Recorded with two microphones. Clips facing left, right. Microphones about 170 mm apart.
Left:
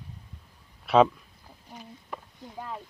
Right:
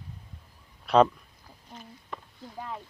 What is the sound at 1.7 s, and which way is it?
Chicken, 10° left (ahead or behind).